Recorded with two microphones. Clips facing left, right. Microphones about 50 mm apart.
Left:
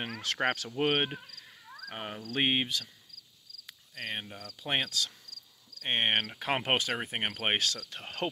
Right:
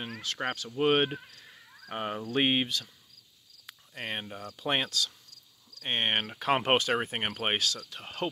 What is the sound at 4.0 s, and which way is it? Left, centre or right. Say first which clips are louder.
Speech: right 2 dB; centre.